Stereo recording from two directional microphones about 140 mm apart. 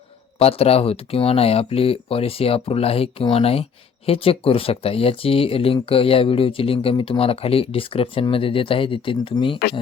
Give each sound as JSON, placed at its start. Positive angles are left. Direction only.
{"t": 0.3, "sound": "speech", "side_deg": 45}